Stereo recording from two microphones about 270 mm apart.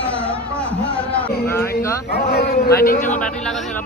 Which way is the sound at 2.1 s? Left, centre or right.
Left.